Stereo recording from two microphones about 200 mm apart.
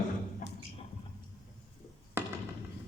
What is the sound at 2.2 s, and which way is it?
Fireworks, 10° right (ahead or behind).